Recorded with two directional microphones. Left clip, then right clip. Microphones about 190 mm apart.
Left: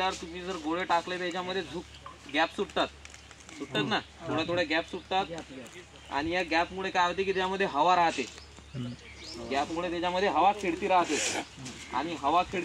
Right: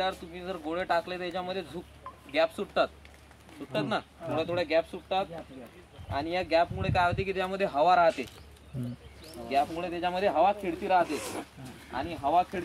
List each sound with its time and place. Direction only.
0.4 s speech: 35° right (ahead or behind)
3.9 s speech: 30° right (ahead or behind)
9.5 s speech: 25° right (ahead or behind)
11.1 s speech: 65° right (ahead or behind)
11.9 s speech: 20° right (ahead or behind)